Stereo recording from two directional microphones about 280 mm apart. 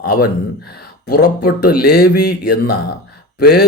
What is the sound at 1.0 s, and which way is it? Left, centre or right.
Speech, left.